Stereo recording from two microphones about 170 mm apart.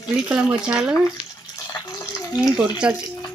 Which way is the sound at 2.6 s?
5° right (ahead or behind).